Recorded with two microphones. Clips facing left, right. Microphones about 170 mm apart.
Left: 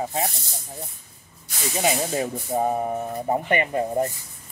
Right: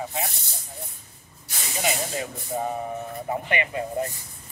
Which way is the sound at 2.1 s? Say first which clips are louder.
Left 5 dB; 45° left (ahead or behind).